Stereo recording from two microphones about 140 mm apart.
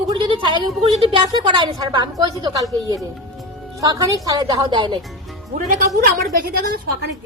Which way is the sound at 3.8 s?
25° right (ahead or behind).